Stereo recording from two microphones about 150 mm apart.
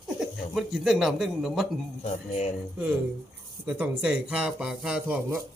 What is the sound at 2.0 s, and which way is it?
Speech, 45° left (ahead or behind).